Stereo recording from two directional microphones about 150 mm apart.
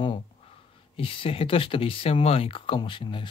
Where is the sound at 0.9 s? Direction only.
35° left (ahead or behind).